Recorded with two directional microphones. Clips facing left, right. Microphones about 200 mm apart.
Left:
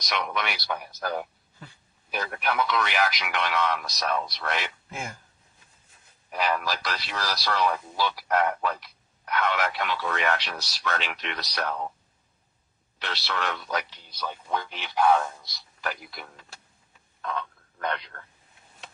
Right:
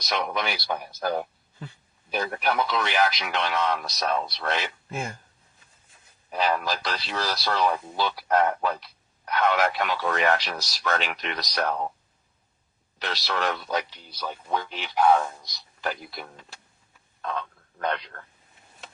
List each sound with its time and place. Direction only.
0.0 s speech: 30° right (ahead or behind)
6.3 s speech: 30° right (ahead or behind)
13.0 s speech: 40° right (ahead or behind)
13.9 s a man's voice: 10° right (ahead or behind)
15.8 s speech: 25° right (ahead or behind)